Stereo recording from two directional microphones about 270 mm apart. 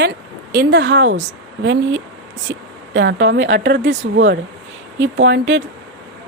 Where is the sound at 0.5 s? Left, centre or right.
Right.